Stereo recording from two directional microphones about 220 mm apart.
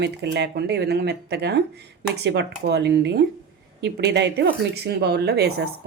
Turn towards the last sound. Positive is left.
turn(degrees=-45)  # may be behind; listen again after turning